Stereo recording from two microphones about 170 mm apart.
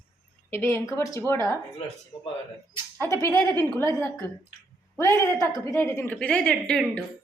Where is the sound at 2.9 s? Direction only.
15° left (ahead or behind).